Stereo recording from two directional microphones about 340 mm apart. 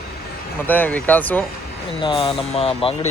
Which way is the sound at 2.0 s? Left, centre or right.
Centre.